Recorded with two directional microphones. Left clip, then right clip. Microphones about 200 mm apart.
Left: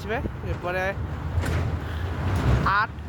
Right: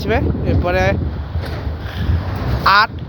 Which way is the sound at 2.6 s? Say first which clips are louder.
Right 11 dB; 35° right (ahead or behind).